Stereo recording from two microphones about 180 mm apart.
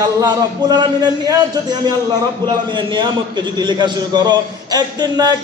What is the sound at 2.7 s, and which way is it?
A man's voice, 25° right (ahead or behind).